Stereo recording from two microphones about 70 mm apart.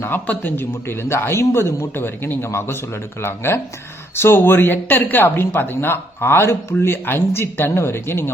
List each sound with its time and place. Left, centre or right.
0.3 s speech: left